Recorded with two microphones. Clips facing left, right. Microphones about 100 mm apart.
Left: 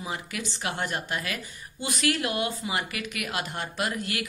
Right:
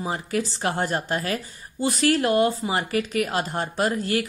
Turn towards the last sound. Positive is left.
turn(degrees=-35)  # may be behind; listen again after turning